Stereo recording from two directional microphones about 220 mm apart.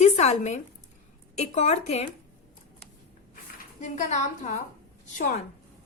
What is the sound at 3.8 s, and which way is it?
A woman's voice, 35° left (ahead or behind).